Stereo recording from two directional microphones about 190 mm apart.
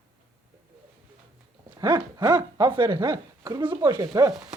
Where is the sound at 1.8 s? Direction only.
20° right (ahead or behind).